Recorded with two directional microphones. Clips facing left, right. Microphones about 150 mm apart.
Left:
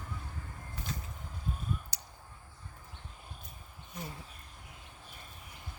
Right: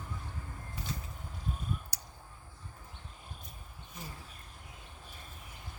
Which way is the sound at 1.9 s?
20° left (ahead or behind).